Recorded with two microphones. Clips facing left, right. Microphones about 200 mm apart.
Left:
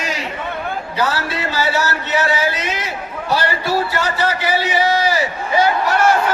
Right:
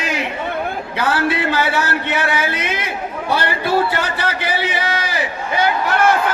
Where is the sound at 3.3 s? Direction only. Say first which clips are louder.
Even; 55° right (ahead or behind).